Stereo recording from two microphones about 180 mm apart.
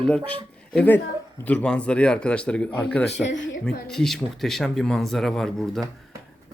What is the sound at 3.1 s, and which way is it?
Speech, 80° left.